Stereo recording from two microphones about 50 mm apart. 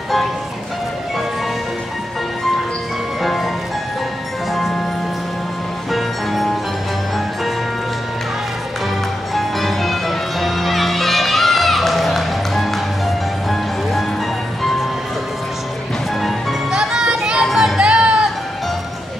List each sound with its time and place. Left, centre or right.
3.2 s music: centre
4.5 s music: centre
5.9 s music: centre
9.3 s music: centre
16.2 s music: centre
16.7 s music: centre
17.5 s music: centre
17.7 s music: centre